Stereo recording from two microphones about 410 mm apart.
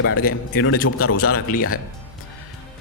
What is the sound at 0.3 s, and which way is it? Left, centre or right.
Speech, left.